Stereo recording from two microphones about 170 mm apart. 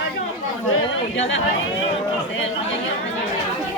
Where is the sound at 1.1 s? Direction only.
90° left.